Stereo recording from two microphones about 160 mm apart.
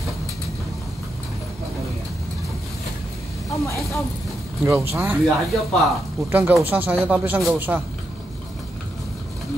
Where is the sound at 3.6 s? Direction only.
20° left (ahead or behind).